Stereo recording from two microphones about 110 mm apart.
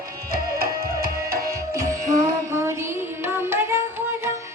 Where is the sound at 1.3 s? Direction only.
30° right (ahead or behind).